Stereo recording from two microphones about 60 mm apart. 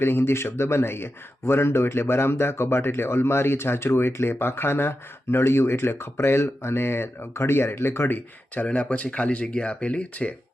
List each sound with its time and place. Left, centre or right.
0.0 s speech: left
8.6 s speech: centre